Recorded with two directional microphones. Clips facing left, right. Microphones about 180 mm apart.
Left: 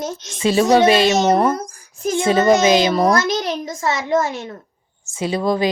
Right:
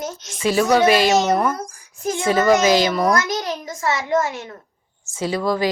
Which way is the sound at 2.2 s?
25° left (ahead or behind).